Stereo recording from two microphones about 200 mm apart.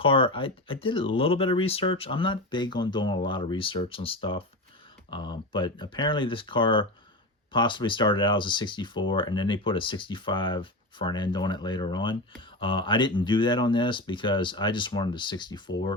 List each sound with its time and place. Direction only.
0.0 s speech: 25° left (ahead or behind)